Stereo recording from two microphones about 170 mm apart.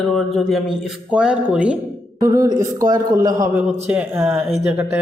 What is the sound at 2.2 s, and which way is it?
A man's voice, 20° right (ahead or behind).